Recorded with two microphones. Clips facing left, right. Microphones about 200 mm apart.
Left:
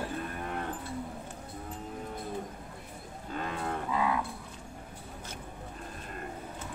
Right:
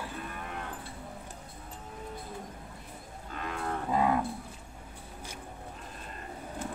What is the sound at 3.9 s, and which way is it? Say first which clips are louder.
Cattle: right 4 dB; 45° right (ahead or behind).